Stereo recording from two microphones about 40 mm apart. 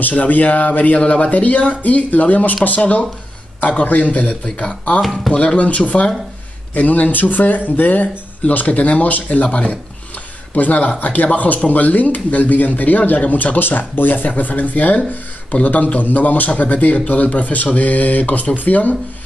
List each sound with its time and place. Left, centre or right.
0.1 s speech: left